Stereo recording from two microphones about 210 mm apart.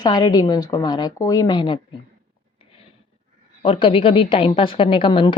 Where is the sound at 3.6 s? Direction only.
25° left (ahead or behind).